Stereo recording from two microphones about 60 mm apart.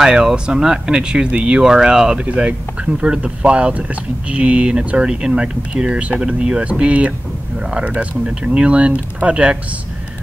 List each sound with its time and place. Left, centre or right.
0.0 s speech: centre